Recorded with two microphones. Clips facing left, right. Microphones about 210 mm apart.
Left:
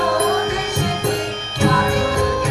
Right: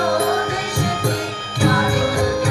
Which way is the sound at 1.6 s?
25° left (ahead or behind).